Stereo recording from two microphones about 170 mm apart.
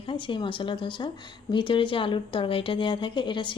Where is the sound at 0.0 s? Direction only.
30° left (ahead or behind).